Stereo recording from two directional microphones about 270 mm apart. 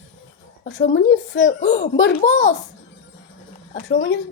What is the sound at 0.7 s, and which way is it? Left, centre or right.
Speech, left.